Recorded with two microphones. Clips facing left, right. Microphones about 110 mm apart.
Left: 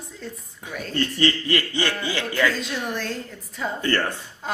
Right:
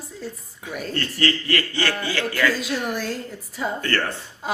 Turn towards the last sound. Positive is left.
turn(degrees=15)  # may be behind; listen again after turning